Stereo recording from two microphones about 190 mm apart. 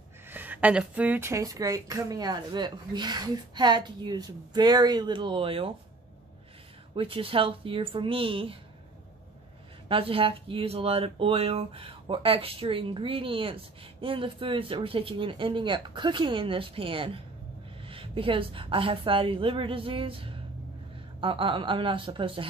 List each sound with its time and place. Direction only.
0.3 s a woman's voice: 10° right (ahead or behind); by 5.7 s 30° right (ahead or behind)
7.0 s a woman's voice: 30° right (ahead or behind)
9.8 s a woman's voice: 30° right (ahead or behind)